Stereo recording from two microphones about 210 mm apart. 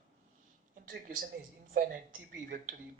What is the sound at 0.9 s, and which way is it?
A man's voice, 40° right (ahead or behind).